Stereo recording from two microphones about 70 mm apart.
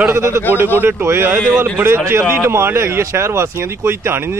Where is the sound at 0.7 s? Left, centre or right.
Right.